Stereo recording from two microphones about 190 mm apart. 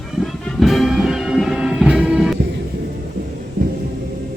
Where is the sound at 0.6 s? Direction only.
Centre (ahead or behind).